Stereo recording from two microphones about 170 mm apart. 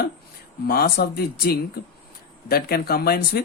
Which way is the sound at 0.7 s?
60° left (ahead or behind).